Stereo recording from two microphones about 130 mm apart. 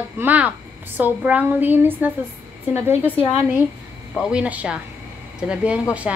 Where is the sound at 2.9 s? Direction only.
50° left (ahead or behind).